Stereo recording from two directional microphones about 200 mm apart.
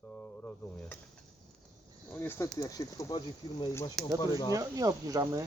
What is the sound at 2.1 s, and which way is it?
Speech, 10° left (ahead or behind).